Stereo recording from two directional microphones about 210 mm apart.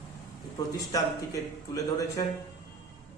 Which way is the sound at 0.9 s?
15° left (ahead or behind).